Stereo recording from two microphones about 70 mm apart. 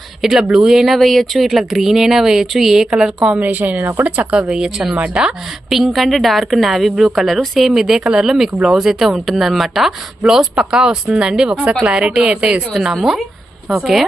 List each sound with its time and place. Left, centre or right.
0.2 s speech: centre
3.3 s a woman's voice: right
12.7 s speech: centre